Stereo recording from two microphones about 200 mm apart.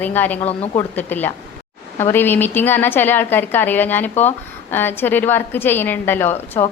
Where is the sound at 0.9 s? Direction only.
10° left (ahead or behind).